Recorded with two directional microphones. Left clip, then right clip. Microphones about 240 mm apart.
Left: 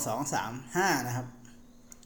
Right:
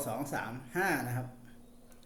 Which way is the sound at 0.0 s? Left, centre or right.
Left.